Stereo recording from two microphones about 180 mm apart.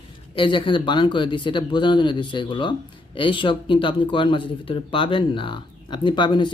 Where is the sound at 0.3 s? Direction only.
30° left (ahead or behind).